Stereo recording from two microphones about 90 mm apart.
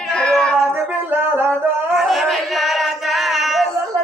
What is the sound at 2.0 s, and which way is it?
Singing, centre (ahead or behind).